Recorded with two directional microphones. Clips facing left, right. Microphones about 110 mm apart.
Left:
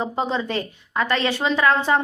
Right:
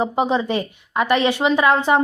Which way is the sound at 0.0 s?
15° right (ahead or behind).